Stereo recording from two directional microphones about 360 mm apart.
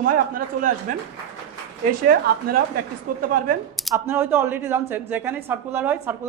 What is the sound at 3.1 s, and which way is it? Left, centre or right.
Speech, right.